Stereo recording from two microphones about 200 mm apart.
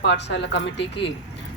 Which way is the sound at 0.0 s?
60° left (ahead or behind).